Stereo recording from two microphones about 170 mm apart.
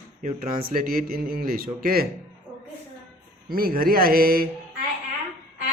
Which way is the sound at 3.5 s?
60° right (ahead or behind).